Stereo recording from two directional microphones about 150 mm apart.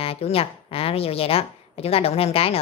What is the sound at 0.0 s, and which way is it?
A woman's voice, 40° left (ahead or behind).